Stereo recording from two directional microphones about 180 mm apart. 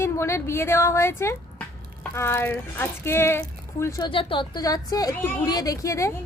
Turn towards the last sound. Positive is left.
turn(degrees=15)  # may be behind; listen again after turning